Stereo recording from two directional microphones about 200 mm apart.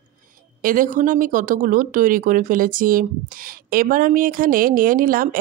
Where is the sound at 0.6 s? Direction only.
40° right (ahead or behind).